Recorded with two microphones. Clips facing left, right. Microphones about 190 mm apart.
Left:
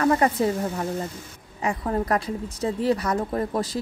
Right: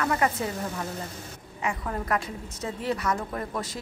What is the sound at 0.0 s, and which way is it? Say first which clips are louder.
A woman's voice: left 6 dB; 35° left (ahead or behind).